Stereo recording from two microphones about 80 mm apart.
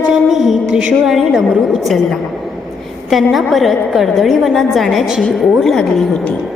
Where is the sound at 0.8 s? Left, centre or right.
Centre.